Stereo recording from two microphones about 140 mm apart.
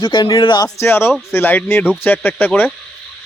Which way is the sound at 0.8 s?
15° left (ahead or behind).